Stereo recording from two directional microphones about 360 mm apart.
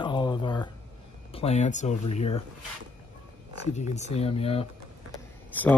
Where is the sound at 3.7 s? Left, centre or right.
Centre.